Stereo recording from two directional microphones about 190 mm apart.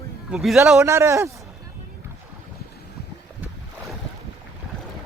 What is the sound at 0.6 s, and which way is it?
Speech, 15° right (ahead or behind).